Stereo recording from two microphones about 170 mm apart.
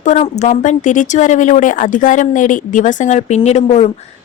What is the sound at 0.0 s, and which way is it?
A woman's voice, 45° left (ahead or behind).